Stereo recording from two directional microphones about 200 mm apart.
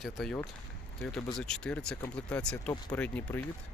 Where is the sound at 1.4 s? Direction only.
5° left (ahead or behind).